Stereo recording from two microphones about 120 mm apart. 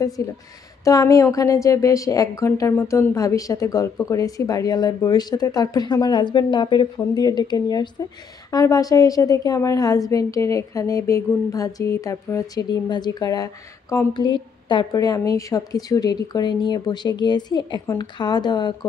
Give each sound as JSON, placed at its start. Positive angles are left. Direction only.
{"t": 0.2, "sound": "a woman's voice", "side_deg": 25}
{"t": 14.2, "sound": "a woman's voice", "side_deg": 40}
{"t": 14.9, "sound": "speech", "side_deg": 30}